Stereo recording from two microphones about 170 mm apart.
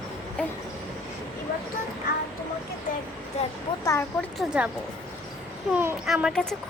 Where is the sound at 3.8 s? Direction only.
15° left (ahead or behind).